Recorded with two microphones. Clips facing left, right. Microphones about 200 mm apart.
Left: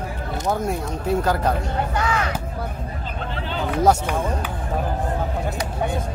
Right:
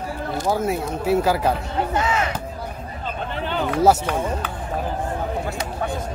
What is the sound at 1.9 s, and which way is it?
Speech, 25° right (ahead or behind).